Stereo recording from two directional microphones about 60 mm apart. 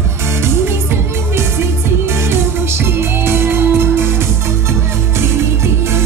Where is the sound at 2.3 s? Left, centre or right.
Right.